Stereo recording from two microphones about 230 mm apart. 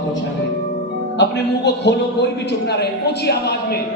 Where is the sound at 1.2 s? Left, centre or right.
Left.